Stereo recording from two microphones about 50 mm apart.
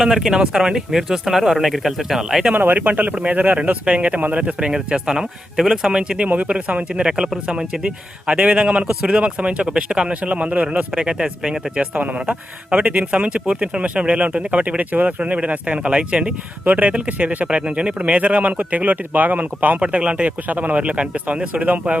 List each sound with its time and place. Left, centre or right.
0.0 s speech: centre
2.6 s speech: right; by 6.2 s centre
6.2 s speech: right
9.0 s speech: centre; by 15.9 s right
15.9 s speech: centre